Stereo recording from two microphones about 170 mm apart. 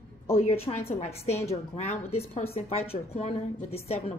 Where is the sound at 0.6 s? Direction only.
35° left (ahead or behind).